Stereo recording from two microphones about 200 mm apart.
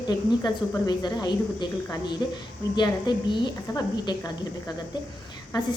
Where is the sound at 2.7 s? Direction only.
20° left (ahead or behind).